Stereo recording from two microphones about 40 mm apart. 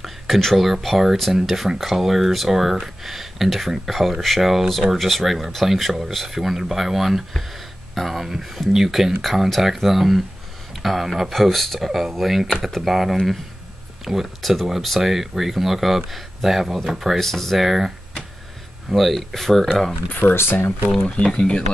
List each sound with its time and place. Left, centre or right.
0.6 s speech: centre
17.6 s speech: centre
20.1 s speech: left
21.0 s speech: left